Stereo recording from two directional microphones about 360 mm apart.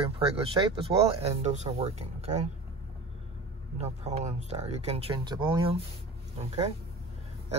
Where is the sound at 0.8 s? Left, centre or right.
Centre.